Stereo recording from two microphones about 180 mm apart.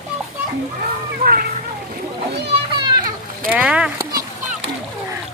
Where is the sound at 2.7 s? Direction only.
25° right (ahead or behind).